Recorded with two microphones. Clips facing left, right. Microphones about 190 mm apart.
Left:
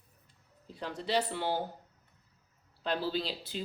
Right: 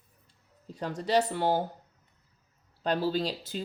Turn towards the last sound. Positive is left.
turn(degrees=-45)  # may be behind; listen again after turning